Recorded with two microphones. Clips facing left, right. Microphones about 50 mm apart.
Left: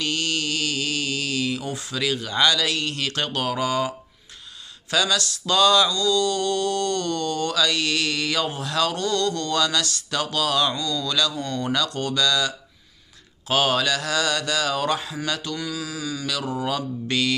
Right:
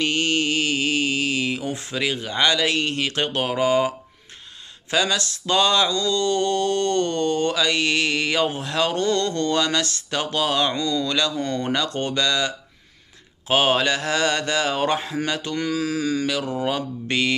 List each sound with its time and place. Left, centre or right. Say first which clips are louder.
0.0 s speech: right 4 dB; right
4.9 s mantra: even; right
13.5 s speech: right 2 dB; right
15.5 s speech: right 6 dB; right
16.5 s mantra: right 2 dB; right